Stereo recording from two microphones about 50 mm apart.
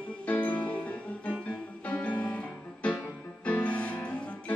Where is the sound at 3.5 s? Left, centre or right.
Left.